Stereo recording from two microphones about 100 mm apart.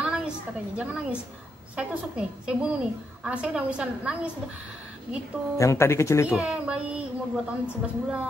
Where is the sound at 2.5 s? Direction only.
10° right (ahead or behind).